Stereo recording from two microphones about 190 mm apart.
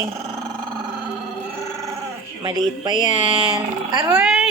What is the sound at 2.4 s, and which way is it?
Speech, 20° right (ahead or behind).